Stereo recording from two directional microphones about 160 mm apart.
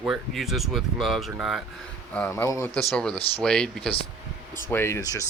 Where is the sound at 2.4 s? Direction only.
20° left (ahead or behind).